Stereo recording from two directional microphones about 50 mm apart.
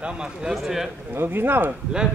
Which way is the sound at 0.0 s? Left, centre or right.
Centre.